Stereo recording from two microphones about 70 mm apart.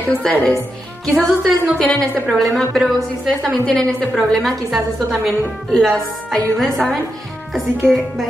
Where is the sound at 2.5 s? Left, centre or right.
Centre.